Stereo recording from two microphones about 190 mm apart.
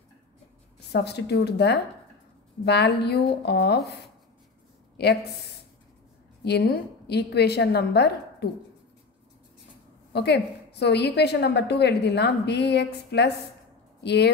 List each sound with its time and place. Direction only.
0.9 s a woman's voice: 60° left (ahead or behind)
5.0 s speech: 60° left (ahead or behind)
6.4 s a woman's voice: 60° left (ahead or behind)
10.1 s a woman's voice: 60° left (ahead or behind)